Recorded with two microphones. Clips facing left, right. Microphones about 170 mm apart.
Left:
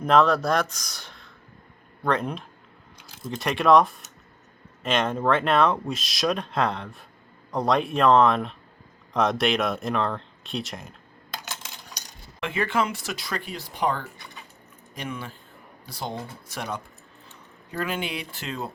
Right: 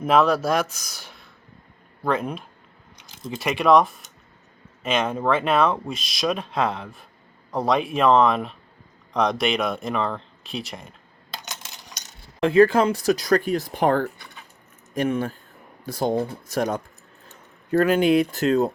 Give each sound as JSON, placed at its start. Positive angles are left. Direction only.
{"t": 0.0, "sound": "speech", "side_deg": -5}
{"t": 12.4, "sound": "speech", "side_deg": -35}